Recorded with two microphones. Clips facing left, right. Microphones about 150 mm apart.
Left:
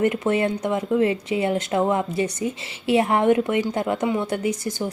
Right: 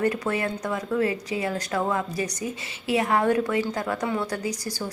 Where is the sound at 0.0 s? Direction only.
25° left (ahead or behind).